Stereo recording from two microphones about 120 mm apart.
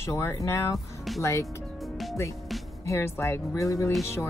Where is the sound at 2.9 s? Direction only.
20° left (ahead or behind).